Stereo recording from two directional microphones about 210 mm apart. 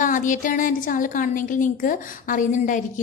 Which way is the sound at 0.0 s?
40° left (ahead or behind).